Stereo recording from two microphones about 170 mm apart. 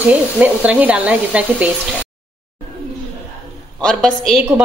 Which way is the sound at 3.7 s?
5° left (ahead or behind).